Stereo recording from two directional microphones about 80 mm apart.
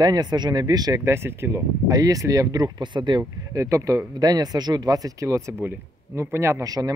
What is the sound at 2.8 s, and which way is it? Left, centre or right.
Speech, right.